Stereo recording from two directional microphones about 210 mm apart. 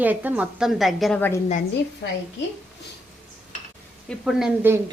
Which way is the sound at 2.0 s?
60° left (ahead or behind).